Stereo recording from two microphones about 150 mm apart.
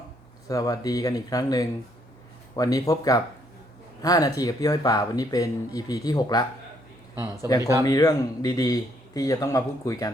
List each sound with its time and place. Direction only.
0.4 s speech: 25° left (ahead or behind)
7.6 s speech: 20° right (ahead or behind)
7.9 s speech: 25° left (ahead or behind)